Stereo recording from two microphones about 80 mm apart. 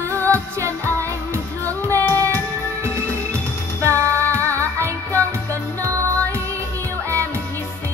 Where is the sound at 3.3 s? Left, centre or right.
Right.